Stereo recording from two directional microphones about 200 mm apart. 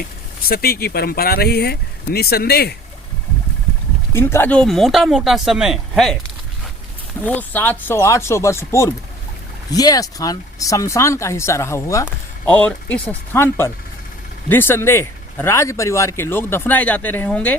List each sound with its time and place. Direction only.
0.4 s speech: 50° left (ahead or behind)
4.1 s speech: 10° left (ahead or behind)
7.2 s speech: 10° left (ahead or behind)